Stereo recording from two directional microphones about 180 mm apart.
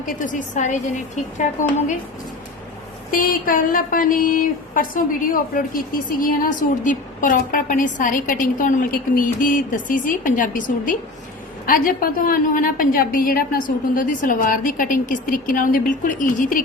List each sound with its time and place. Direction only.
0.0 s a woman's voice: 45° left (ahead or behind)
3.1 s a woman's voice: 50° left (ahead or behind)